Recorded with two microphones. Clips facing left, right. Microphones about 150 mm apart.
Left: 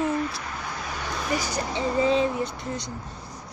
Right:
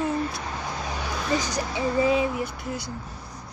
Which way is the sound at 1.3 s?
15° right (ahead or behind).